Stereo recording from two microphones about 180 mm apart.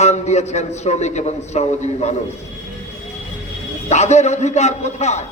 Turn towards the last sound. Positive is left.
turn(degrees=40)  # may be behind; listen again after turning